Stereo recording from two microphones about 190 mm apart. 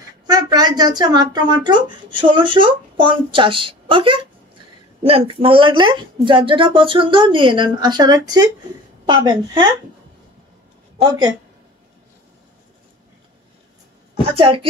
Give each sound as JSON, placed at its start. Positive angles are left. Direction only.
{"t": 0.3, "sound": "speech", "side_deg": -20}
{"t": 11.0, "sound": "speech", "side_deg": -20}
{"t": 14.3, "sound": "speech", "side_deg": -30}